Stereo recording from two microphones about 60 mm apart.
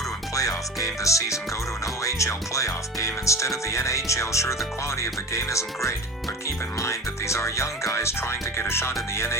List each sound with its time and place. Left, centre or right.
0.3 s speech: left